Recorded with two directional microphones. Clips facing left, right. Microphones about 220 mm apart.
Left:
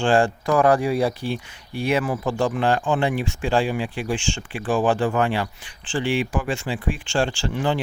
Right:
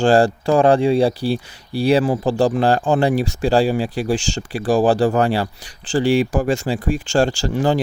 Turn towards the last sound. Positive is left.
turn(degrees=-40)  # may be behind; listen again after turning